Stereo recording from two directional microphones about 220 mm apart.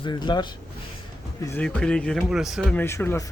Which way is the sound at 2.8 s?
10° left (ahead or behind).